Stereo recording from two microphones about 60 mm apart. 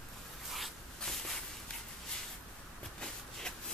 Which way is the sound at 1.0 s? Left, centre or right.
Centre.